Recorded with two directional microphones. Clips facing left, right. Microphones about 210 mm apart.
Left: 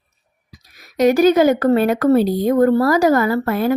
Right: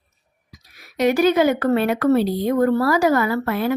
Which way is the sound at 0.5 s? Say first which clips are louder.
Left 4 dB; 40° left (ahead or behind).